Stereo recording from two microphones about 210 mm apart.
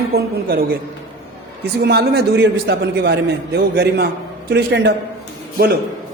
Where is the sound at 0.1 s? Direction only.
45° right (ahead or behind).